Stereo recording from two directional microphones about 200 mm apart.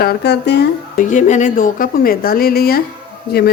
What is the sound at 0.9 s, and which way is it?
A woman's voice, 40° left (ahead or behind).